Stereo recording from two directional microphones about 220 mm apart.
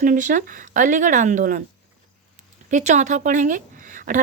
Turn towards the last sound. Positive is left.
turn(degrees=-35)  # may be behind; listen again after turning